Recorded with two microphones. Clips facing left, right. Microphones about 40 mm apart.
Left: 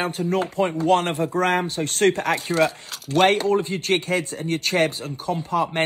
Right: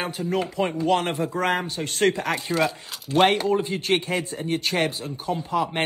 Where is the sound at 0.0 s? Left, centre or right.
Left.